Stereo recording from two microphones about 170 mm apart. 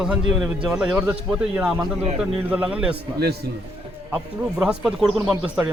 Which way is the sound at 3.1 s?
70° right (ahead or behind).